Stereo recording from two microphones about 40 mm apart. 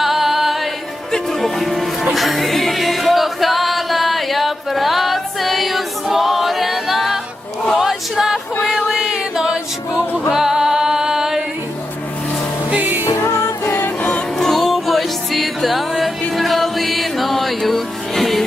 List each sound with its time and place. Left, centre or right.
0.0 s music: centre
1.1 s music: centre
7.8 s a sound: centre
9.0 s music: centre
12.8 s music: right
14.3 s music: centre